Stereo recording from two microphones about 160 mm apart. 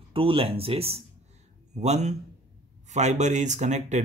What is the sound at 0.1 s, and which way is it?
Speech, 35° right (ahead or behind).